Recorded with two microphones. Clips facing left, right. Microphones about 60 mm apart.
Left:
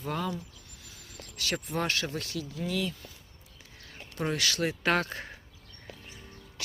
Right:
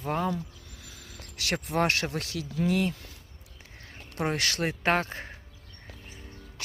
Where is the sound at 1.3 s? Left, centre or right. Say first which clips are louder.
Right 4 dB; right.